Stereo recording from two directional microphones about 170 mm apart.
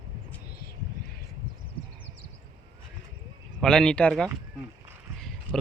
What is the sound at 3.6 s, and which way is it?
Speech, 5° left (ahead or behind).